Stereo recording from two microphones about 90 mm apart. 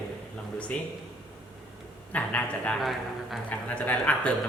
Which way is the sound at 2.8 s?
Centre (ahead or behind).